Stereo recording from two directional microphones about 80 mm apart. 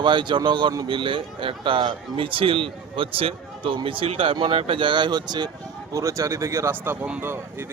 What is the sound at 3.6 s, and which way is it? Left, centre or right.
Speech, right.